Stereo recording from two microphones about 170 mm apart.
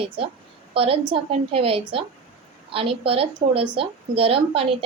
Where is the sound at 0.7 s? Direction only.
35° right (ahead or behind).